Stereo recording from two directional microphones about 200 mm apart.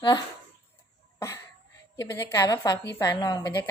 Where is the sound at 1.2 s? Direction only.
15° left (ahead or behind).